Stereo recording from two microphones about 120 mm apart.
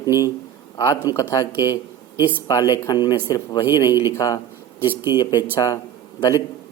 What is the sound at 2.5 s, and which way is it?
Speech, 30° left (ahead or behind).